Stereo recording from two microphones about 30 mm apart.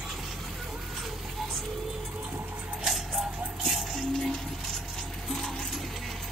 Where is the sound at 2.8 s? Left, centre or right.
Centre.